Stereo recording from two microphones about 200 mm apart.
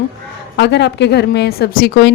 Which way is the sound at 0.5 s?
60° left (ahead or behind).